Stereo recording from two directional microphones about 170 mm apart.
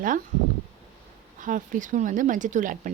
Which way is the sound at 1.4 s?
50° right (ahead or behind).